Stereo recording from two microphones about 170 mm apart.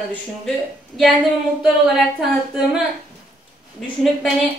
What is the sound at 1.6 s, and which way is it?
A woman's voice, 5° right (ahead or behind).